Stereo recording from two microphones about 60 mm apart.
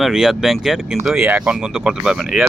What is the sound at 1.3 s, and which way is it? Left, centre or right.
Speech, centre.